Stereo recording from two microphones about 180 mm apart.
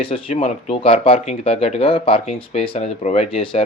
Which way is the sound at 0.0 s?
30° left (ahead or behind).